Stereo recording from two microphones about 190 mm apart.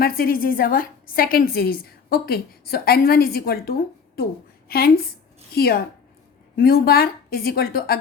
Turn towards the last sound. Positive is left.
turn(degrees=55)  # may be behind; listen again after turning